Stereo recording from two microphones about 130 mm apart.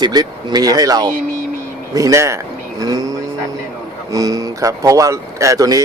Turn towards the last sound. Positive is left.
turn(degrees=-25)  # may be behind; listen again after turning